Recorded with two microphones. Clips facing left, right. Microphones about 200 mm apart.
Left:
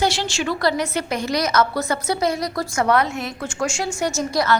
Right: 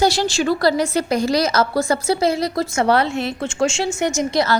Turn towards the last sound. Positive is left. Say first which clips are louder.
# right 2 dB
turn(degrees=-25)  # may be behind; listen again after turning